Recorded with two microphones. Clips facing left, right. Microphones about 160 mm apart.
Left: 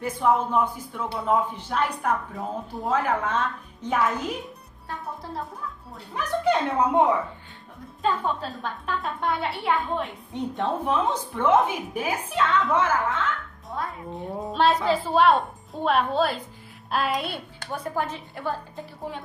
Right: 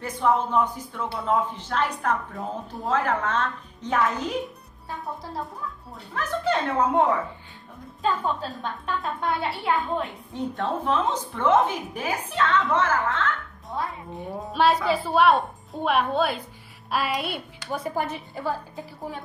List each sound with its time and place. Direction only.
0.0 s a woman's voice: 5° left (ahead or behind)
6.1 s a woman's voice: 15° left (ahead or behind)
8.0 s a woman's voice: centre (ahead or behind)
10.3 s a woman's voice: 20° left (ahead or behind)
13.7 s a woman's voice: 5° right (ahead or behind)